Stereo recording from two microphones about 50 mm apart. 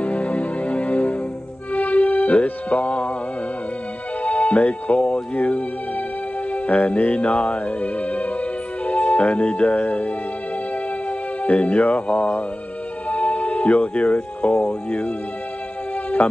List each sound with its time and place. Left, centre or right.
0.0 s music: left
4.2 s music: left
11.1 s speech: left
16.2 s music: left